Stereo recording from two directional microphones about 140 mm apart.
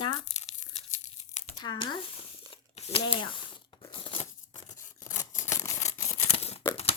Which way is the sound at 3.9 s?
40° left (ahead or behind).